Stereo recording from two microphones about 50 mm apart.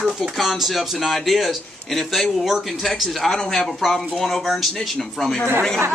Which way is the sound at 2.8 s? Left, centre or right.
Centre.